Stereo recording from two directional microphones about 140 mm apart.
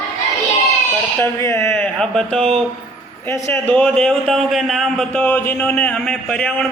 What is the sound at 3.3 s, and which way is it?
A man's voice, 15° left (ahead or behind).